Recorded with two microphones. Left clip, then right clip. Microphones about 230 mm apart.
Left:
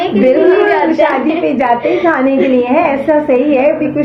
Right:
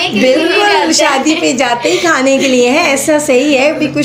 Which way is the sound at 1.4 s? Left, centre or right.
Right.